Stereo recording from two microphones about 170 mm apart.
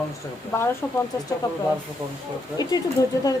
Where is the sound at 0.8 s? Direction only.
10° left (ahead or behind).